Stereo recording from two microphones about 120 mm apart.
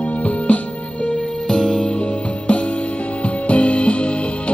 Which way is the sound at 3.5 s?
10° left (ahead or behind).